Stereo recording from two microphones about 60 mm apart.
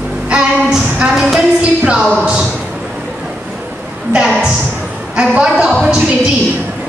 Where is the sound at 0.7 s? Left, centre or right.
Centre.